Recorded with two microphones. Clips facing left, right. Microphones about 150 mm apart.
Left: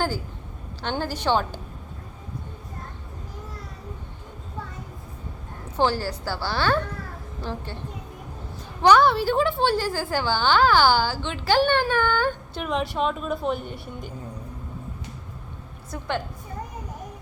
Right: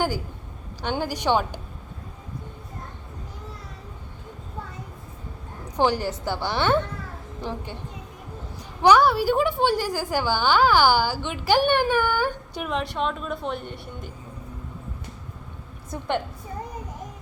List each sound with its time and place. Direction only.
0.8 s a woman's voice: 15° right (ahead or behind)
5.6 s a woman's voice: 15° right (ahead or behind)
8.8 s a woman's voice: 10° right (ahead or behind)
12.7 s a woman's voice: centre (ahead or behind)
15.9 s a woman's voice: 20° right (ahead or behind)